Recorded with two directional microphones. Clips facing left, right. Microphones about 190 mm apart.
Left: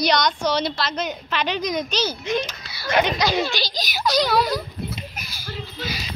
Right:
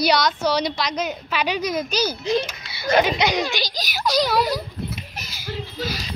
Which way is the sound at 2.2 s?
35° right (ahead or behind).